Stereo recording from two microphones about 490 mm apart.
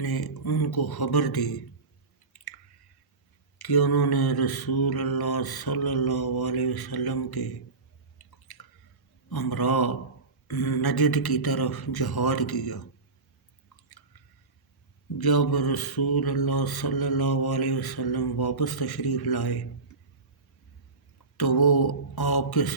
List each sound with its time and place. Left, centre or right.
0.0 s mantra: left
3.6 s mantra: left
8.5 s drip: left
9.3 s mantra: left
15.2 s mantra: left
21.3 s mantra: left